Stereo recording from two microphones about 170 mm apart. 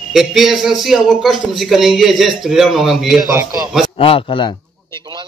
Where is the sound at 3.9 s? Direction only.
35° left (ahead or behind).